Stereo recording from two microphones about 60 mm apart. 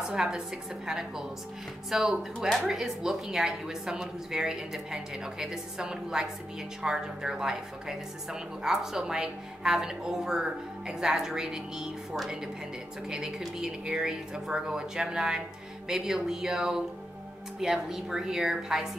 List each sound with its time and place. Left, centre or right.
0.1 s a woman's voice: centre